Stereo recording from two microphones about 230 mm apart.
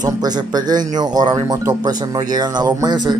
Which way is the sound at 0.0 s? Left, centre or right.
Centre.